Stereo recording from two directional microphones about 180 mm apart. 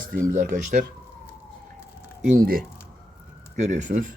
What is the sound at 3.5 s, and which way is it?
Speech, 40° right (ahead or behind).